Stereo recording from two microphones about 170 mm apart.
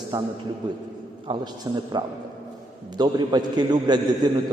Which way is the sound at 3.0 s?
25° right (ahead or behind).